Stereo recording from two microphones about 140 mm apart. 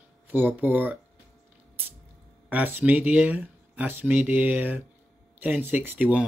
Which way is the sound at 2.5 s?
15° right (ahead or behind).